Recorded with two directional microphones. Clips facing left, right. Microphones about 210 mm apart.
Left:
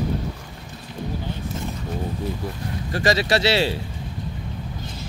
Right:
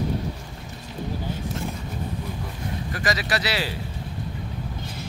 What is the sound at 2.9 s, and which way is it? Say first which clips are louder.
Speech: left 7 dB; 30° left (ahead or behind).